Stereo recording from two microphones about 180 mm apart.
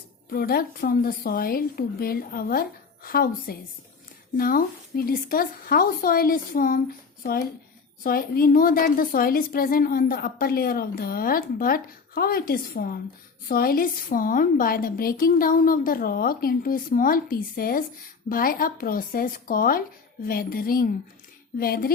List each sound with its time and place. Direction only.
0.3 s a woman's voice: 55° left (ahead or behind)